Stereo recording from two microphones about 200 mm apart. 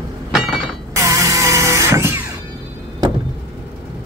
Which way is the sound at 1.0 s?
15° right (ahead or behind).